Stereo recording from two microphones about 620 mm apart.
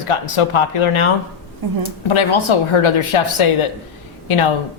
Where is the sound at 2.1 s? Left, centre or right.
Left.